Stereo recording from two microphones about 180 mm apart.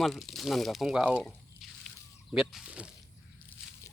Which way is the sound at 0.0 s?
Centre (ahead or behind).